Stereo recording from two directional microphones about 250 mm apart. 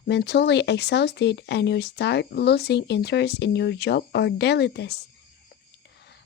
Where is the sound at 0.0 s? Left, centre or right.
Left.